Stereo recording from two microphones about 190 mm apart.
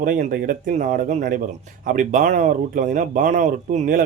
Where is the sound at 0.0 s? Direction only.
45° right (ahead or behind).